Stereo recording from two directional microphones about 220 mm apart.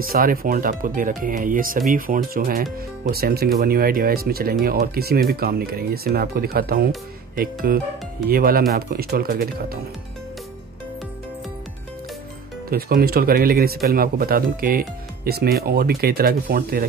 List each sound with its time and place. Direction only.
0.0 s speech: 40° right (ahead or behind)
12.6 s speech: 40° right (ahead or behind)